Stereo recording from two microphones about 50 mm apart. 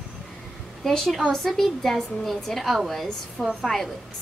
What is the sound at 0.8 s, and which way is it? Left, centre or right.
A woman's voice, centre.